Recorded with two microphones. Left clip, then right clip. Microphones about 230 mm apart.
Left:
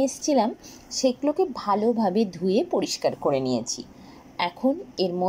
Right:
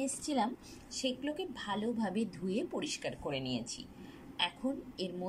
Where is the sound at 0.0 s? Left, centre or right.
Centre.